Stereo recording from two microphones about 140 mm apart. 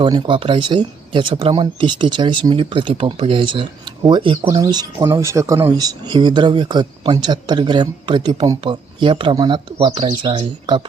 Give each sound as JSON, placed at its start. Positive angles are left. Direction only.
{"t": 0.0, "sound": "speech", "side_deg": -35}
{"t": 4.4, "sound": "speech", "side_deg": -20}
{"t": 4.7, "sound": "speech", "side_deg": -30}